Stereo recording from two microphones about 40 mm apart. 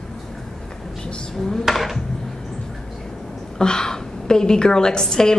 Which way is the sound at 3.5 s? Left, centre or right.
Centre.